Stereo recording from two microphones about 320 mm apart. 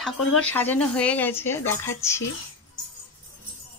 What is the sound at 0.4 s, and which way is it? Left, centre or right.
Speech, centre.